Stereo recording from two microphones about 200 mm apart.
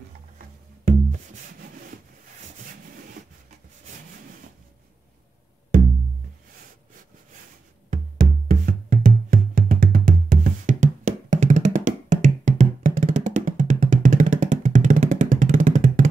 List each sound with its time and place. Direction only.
0.8 s music: 40° right (ahead or behind)
7.9 s music: 40° right (ahead or behind)